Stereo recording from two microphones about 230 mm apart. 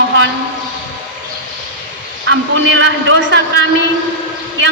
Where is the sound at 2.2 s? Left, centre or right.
Right.